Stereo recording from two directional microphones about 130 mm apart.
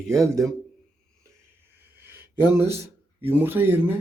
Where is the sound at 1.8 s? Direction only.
15° right (ahead or behind).